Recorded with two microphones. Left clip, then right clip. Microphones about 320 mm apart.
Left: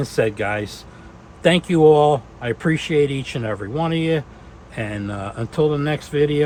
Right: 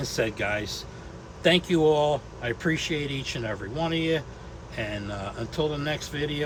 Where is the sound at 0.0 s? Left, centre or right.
Centre.